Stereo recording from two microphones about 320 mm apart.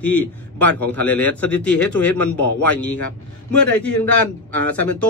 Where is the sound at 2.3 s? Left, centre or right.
Left.